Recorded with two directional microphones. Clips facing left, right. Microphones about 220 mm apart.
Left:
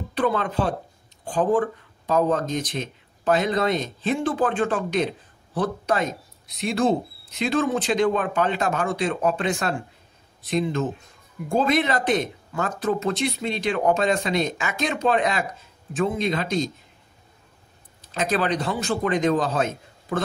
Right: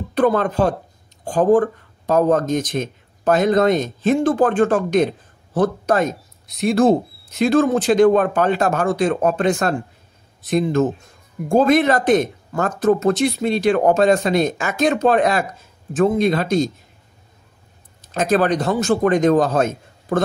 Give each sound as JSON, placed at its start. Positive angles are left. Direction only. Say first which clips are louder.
{"t": 0.1, "sound": "speech", "louder": "right 6 dB", "side_deg": -45}
{"t": 18.0, "sound": "speech", "louder": "right 7 dB", "side_deg": -45}